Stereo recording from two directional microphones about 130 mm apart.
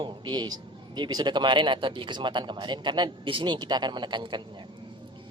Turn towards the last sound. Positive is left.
turn(degrees=-35)  # may be behind; listen again after turning